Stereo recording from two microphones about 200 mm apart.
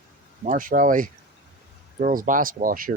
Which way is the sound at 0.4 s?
40° right (ahead or behind).